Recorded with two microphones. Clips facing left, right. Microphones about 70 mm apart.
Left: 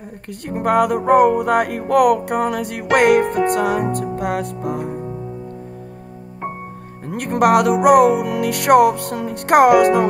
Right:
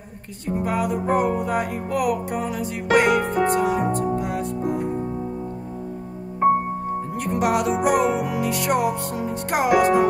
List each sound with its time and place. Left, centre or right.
0.5 s music: left
7.1 s music: left